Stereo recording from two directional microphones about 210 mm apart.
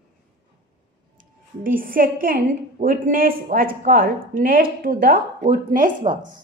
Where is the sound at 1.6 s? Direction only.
40° right (ahead or behind).